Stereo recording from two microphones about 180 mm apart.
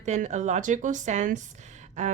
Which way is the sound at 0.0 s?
40° right (ahead or behind).